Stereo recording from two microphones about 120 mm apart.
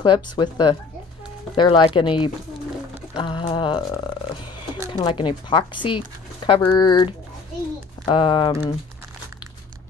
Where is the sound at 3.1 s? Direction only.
45° left (ahead or behind).